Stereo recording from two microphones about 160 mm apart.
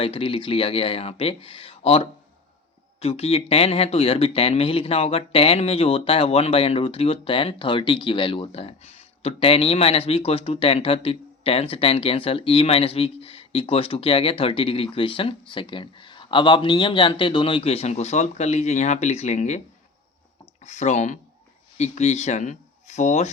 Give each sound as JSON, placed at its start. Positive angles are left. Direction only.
{"t": 0.0, "sound": "speech", "side_deg": 35}